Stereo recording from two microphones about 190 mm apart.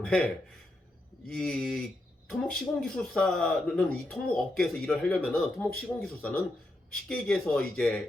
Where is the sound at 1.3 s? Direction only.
5° left (ahead or behind).